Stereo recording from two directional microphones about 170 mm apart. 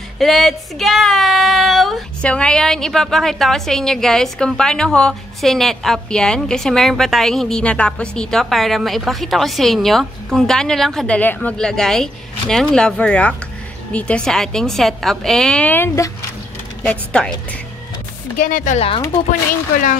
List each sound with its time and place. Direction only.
0.2 s speech: centre (ahead or behind)
18.4 s speech: 50° left (ahead or behind)